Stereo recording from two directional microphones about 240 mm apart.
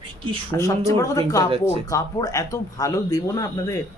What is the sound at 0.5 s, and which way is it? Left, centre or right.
Speech, centre.